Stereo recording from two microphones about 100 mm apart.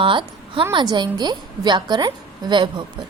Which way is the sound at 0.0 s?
60° right (ahead or behind).